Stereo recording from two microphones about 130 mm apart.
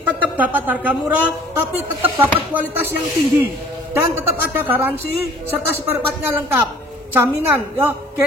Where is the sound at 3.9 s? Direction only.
15° right (ahead or behind).